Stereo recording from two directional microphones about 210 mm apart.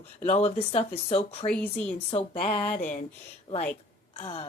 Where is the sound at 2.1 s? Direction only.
30° left (ahead or behind).